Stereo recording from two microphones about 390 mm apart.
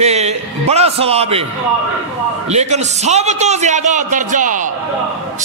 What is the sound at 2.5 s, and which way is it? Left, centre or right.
A man's voice, centre.